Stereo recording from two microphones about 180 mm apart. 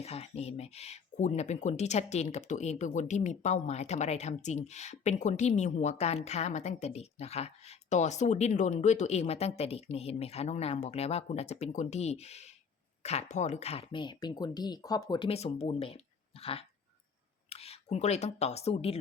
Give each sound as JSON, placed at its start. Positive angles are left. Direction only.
{"t": 0.0, "sound": "speech", "side_deg": 35}
{"t": 15.3, "sound": "speech", "side_deg": 35}